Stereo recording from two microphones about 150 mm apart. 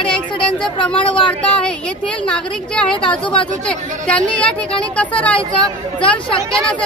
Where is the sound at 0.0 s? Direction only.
5° left (ahead or behind).